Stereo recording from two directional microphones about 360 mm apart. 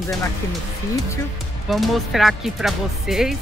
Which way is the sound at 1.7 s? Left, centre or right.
Centre.